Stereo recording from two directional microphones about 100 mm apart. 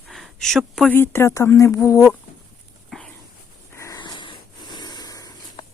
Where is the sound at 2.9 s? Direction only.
5° left (ahead or behind).